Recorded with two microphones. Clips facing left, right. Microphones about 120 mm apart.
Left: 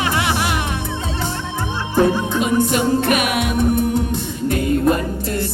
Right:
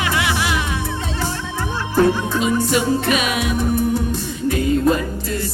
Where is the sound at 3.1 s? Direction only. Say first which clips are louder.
Left 1 dB; 55° left (ahead or behind).